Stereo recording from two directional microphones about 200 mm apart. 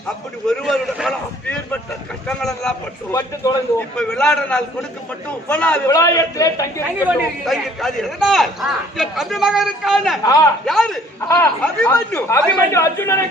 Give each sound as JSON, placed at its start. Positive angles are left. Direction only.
{"t": 0.4, "sound": "a man's voice", "side_deg": 0}
{"t": 2.2, "sound": "vehicle", "side_deg": 5}
{"t": 3.1, "sound": "a man's voice", "side_deg": 15}
{"t": 7.0, "sound": "a man's voice", "side_deg": 0}